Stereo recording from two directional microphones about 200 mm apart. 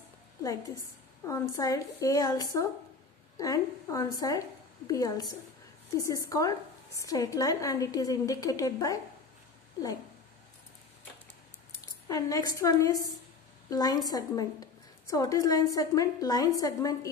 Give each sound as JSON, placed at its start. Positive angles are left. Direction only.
{"t": 1.2, "sound": "a woman's voice", "side_deg": 15}
{"t": 12.1, "sound": "a woman's voice", "side_deg": 20}